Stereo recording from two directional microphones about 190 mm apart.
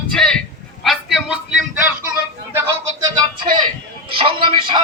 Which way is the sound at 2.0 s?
10° right (ahead or behind).